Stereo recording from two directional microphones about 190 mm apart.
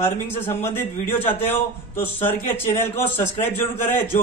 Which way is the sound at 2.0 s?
10° left (ahead or behind).